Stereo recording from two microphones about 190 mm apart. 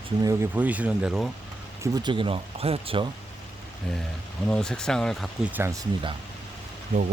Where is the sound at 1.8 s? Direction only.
20° right (ahead or behind).